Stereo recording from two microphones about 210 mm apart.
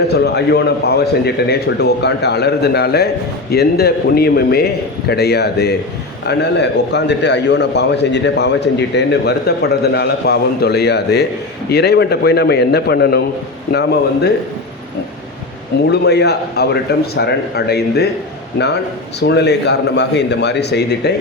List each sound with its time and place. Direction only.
0.1 s a man's voice: 50° left (ahead or behind)
15.9 s a man's voice: 50° left (ahead or behind)
19.3 s a man's voice: 55° left (ahead or behind)